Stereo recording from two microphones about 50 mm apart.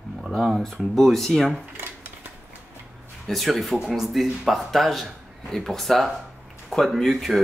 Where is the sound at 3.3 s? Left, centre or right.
Centre.